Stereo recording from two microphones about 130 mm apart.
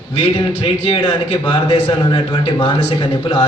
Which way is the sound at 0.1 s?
45° left (ahead or behind).